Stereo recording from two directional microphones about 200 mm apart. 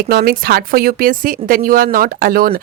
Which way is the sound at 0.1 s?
50° right (ahead or behind).